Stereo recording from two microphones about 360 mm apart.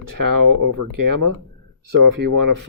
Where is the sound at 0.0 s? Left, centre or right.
Right.